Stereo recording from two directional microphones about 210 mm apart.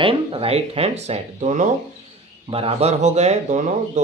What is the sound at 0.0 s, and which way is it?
Speech, 25° right (ahead or behind).